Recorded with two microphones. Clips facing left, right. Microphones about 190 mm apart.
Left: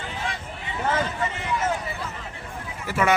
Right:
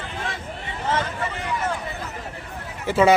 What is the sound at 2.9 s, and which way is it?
Speech, 25° right (ahead or behind).